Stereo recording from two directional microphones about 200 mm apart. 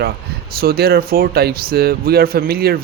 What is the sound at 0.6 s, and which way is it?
Speech, 50° right (ahead or behind).